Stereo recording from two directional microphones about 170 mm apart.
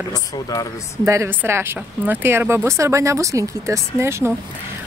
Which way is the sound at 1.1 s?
15° right (ahead or behind).